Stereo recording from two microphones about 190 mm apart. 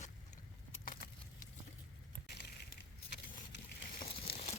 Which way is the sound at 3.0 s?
60° left (ahead or behind).